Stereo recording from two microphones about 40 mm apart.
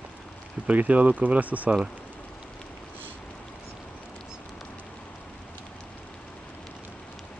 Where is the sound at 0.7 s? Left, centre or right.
Right.